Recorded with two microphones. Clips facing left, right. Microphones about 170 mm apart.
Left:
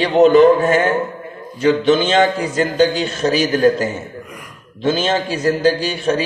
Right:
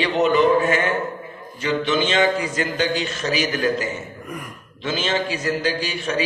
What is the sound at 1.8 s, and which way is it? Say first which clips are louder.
A man's voice: left 3 dB; 35° left (ahead or behind).